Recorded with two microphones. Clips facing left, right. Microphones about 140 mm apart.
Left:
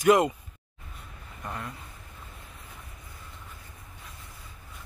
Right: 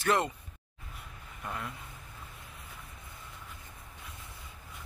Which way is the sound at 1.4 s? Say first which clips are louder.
Left 2 dB; centre (ahead or behind).